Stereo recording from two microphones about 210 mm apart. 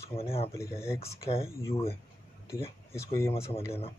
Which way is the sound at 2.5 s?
15° left (ahead or behind).